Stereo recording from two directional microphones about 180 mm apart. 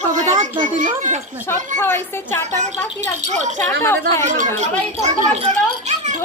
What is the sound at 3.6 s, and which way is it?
Speech, 15° left (ahead or behind).